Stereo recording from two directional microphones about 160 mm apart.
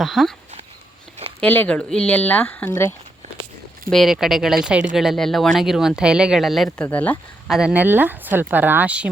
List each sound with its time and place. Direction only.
0.0 s speech: centre (ahead or behind)
1.4 s speech: 10° left (ahead or behind)
3.9 s speech: centre (ahead or behind)
7.5 s speech: 5° right (ahead or behind)